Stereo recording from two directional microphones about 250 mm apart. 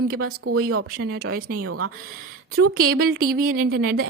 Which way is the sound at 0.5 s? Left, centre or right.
Right.